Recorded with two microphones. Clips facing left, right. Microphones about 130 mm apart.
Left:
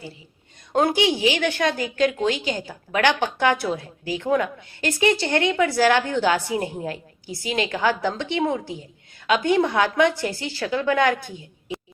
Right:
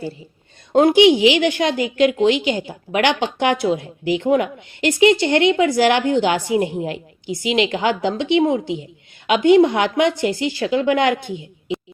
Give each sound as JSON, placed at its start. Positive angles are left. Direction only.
{"t": 0.7, "sound": "a woman's voice", "side_deg": -20}